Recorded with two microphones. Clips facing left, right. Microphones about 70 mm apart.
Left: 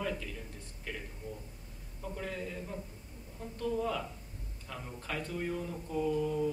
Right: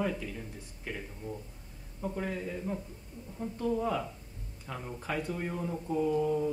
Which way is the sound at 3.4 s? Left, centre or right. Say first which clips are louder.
Right 3 dB; centre.